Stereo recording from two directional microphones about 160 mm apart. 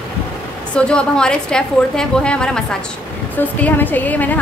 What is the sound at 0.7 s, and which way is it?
A woman's voice, 5° left (ahead or behind).